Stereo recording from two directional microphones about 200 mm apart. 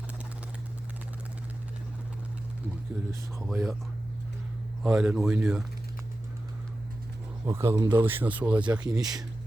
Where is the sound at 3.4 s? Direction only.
Centre (ahead or behind).